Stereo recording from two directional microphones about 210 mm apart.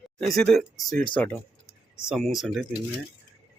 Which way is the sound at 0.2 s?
Centre (ahead or behind).